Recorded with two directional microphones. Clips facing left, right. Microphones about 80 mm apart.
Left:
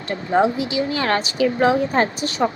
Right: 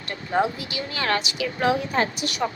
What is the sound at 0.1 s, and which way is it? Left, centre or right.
A woman's voice, left.